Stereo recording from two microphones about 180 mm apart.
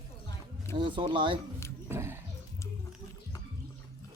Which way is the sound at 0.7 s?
25° right (ahead or behind).